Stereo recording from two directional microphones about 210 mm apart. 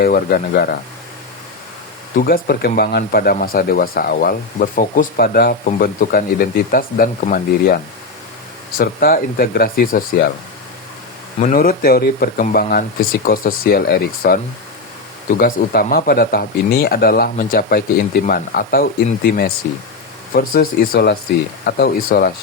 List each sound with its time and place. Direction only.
0.0 s speech: 45° left (ahead or behind)
2.1 s speech: 45° left (ahead or behind)
8.8 s speech: 45° left (ahead or behind)
11.3 s speech: 40° left (ahead or behind)
15.4 s speech: 45° left (ahead or behind)